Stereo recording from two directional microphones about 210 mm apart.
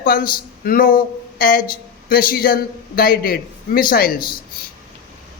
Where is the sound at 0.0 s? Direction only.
45° left (ahead or behind).